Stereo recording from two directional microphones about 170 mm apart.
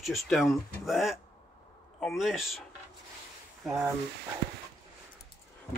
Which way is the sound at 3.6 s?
5° right (ahead or behind).